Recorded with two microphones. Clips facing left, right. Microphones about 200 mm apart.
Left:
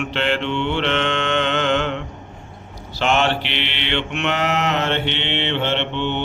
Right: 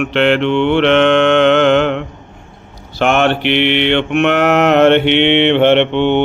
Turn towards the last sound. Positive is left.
turn(degrees=-60)  # may be behind; listen again after turning